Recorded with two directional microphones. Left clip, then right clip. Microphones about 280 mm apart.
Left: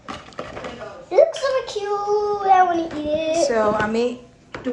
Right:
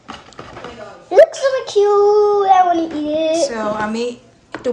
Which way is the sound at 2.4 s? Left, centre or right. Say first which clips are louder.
Even; right.